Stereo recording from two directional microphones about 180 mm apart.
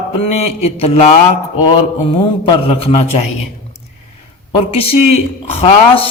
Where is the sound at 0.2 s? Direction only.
35° left (ahead or behind).